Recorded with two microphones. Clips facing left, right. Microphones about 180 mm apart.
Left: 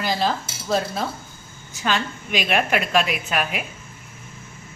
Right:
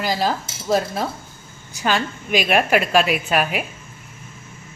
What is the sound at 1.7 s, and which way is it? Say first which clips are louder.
A woman's voice: right 3 dB; 40° right (ahead or behind).